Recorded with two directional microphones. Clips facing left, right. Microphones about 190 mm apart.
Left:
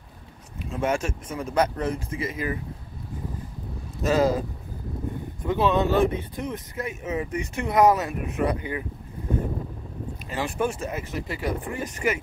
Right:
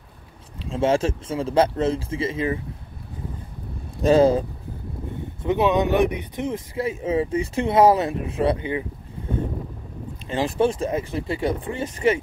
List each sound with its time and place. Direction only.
0.6 s speech: 30° right (ahead or behind)
4.0 s speech: 30° right (ahead or behind)
10.2 s speech: 30° right (ahead or behind)